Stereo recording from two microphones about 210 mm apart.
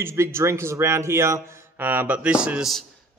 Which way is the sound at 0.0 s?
10° right (ahead or behind).